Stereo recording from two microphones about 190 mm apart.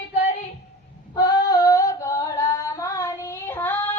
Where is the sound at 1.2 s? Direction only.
20° left (ahead or behind).